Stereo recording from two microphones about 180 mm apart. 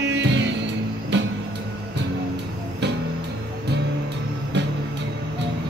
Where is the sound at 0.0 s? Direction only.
70° right (ahead or behind).